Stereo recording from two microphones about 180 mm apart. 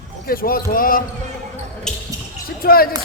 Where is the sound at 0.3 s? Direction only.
55° left (ahead or behind).